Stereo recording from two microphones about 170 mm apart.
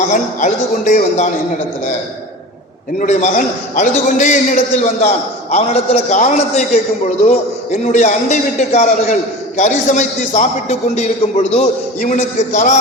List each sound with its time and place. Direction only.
0.1 s a man's voice: 45° left (ahead or behind)
3.0 s a man's voice: 45° left (ahead or behind)